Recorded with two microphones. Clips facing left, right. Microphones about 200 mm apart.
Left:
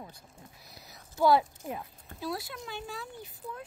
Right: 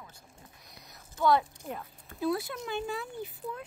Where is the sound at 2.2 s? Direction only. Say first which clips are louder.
Right 6 dB; 55° right (ahead or behind).